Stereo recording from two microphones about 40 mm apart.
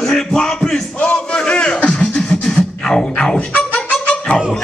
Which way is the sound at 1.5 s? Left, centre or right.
Left.